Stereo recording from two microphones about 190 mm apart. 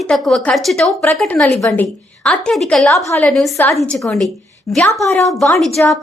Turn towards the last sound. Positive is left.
turn(degrees=0)  # may be behind; listen again after turning